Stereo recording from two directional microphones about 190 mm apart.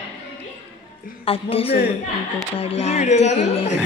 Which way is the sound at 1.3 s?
30° left (ahead or behind).